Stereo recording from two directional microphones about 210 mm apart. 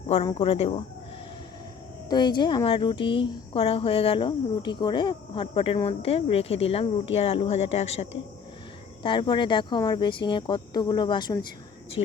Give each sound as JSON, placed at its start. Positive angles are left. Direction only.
{"t": 0.3, "sound": "speech", "side_deg": 25}
{"t": 2.0, "sound": "speech", "side_deg": 20}